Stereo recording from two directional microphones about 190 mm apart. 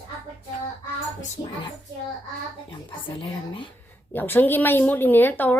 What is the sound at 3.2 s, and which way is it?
Speech, 25° left (ahead or behind).